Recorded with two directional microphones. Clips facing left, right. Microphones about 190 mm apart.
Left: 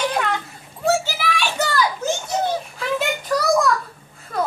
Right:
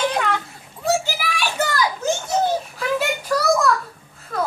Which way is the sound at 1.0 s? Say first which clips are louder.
Left 1 dB; 10° right (ahead or behind).